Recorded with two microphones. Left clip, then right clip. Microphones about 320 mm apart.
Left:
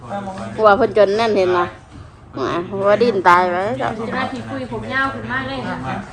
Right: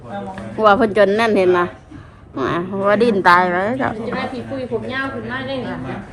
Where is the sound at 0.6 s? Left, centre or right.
Right.